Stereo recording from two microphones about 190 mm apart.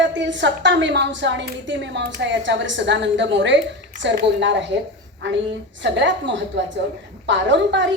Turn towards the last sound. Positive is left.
turn(degrees=-70)  # may be behind; listen again after turning